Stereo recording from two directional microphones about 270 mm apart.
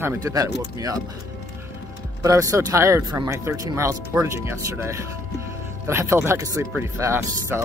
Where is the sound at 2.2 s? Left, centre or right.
Centre.